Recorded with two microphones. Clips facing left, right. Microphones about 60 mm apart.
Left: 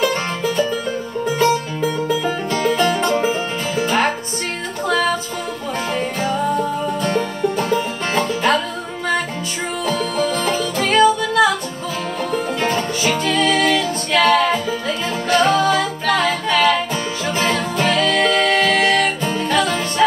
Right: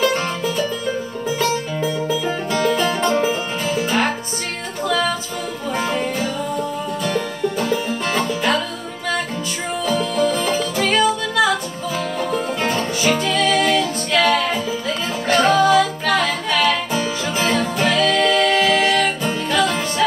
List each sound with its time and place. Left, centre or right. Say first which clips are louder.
0.0 s music: even; centre
7.2 s music: left 2 dB; centre
10.1 s music: right 1 dB; centre
14.2 s music: left 5 dB; left
15.4 s music: right 4 dB; centre
18.2 s music: even; left
18.5 s music: left 1 dB; centre